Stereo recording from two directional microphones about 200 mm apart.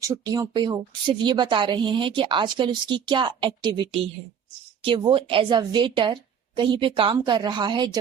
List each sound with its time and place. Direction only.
0.0 s a woman's voice: 15° right (ahead or behind)